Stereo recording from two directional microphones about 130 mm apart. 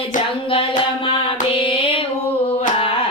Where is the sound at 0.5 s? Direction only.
40° left (ahead or behind).